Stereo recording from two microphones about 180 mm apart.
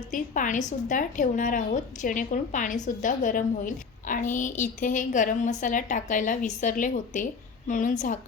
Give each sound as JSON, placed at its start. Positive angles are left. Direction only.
{"t": 0.1, "sound": "a woman's voice", "side_deg": 45}